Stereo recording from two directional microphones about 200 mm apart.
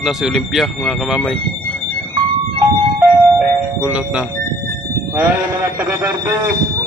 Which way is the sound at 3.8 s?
5° right (ahead or behind).